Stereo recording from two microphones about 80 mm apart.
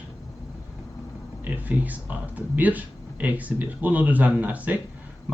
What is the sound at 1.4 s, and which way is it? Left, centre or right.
Speech, right.